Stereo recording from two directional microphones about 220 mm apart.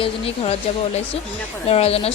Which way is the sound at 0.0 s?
25° left (ahead or behind).